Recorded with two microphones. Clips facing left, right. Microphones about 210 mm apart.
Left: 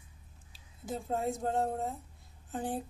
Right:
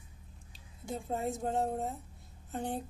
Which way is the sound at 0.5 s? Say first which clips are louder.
Left 1 dB; centre (ahead or behind).